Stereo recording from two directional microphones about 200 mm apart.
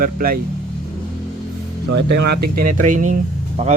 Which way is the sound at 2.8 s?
40° right (ahead or behind).